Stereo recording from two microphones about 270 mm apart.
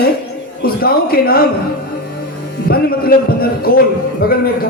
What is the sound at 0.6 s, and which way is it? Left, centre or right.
Speech, left.